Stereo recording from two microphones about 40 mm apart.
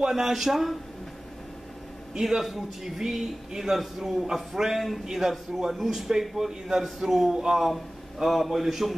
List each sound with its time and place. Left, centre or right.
0.0 s a man's voice: centre
2.1 s a man's voice: centre